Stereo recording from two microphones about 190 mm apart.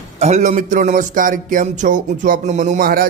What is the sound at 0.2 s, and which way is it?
Speech, 35° right (ahead or behind).